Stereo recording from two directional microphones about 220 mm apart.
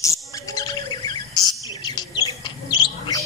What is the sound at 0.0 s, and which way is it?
Chirp, 15° left (ahead or behind).